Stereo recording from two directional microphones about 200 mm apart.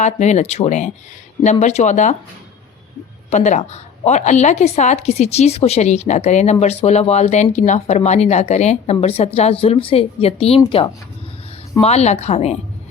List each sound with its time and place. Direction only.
0.0 s a woman's voice: 35° left (ahead or behind)
3.2 s a woman's voice: 35° left (ahead or behind)